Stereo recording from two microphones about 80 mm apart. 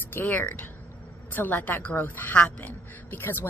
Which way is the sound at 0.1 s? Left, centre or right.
Left.